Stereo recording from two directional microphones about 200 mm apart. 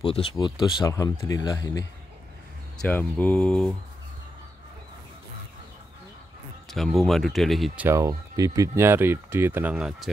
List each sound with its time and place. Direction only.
0.0 s speech: 30° left (ahead or behind); by 3.7 s 5° left (ahead or behind)
6.7 s speech: centre (ahead or behind)